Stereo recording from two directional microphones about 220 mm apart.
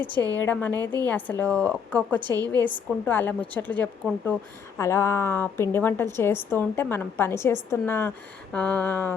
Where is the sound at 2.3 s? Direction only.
15° right (ahead or behind).